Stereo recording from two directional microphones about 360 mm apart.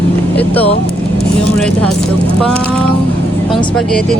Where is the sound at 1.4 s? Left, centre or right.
Centre.